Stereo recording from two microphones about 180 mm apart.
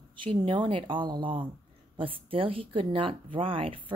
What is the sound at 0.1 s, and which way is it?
Speech, 30° right (ahead or behind).